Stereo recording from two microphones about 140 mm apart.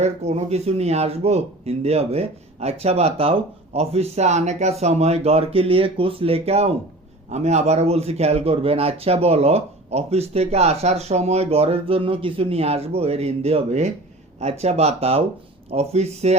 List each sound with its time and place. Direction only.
0.0 s speech: 50° right (ahead or behind)